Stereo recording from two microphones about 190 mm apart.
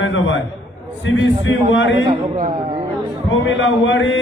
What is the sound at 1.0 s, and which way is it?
Speech, 75° left (ahead or behind).